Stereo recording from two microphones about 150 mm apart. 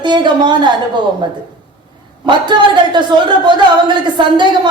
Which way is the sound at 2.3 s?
30° right (ahead or behind).